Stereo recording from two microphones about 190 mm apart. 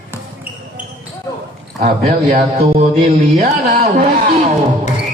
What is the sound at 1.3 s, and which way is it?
Basketball bounce, 20° left (ahead or behind).